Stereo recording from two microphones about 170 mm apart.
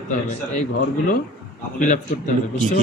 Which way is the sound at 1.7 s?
45° left (ahead or behind).